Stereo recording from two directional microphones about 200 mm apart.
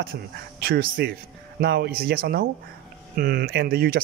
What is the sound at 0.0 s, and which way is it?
A man's voice, 50° right (ahead or behind).